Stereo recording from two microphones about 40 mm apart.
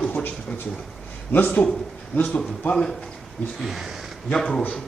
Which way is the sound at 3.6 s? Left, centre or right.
Centre.